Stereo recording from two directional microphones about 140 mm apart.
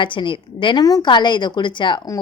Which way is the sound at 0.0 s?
35° left (ahead or behind).